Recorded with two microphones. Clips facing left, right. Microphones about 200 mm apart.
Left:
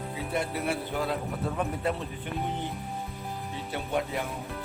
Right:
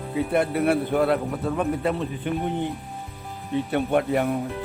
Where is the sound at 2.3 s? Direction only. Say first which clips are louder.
Right 8 dB; 80° right.